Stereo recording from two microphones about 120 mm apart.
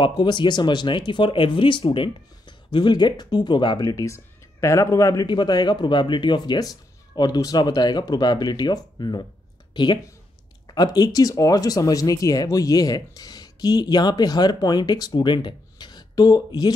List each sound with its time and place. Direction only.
0.0 s speech: 40° left (ahead or behind)
3.8 s speech: 25° left (ahead or behind)
5.2 s speech: 40° left (ahead or behind)